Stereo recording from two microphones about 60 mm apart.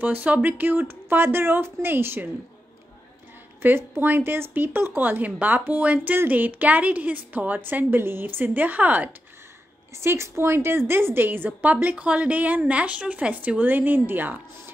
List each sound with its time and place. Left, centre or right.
0.0 s speech: right
3.6 s a woman's voice: right
9.9 s a woman's voice: right